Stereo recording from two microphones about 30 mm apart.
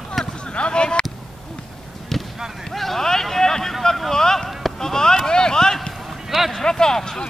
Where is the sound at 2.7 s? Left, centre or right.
Centre.